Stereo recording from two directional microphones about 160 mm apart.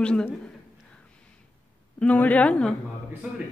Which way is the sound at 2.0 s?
10° left (ahead or behind).